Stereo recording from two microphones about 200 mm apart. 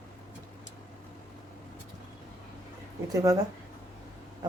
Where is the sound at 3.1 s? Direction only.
20° right (ahead or behind).